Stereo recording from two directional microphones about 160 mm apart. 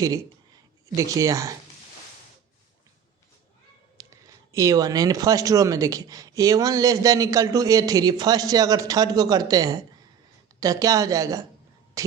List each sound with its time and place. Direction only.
0.9 s speech: 20° right (ahead or behind)
3.9 s speech: 20° right (ahead or behind)
12.0 s whispering: 20° right (ahead or behind)